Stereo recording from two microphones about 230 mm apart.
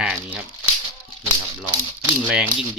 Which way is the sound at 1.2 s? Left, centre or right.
Centre.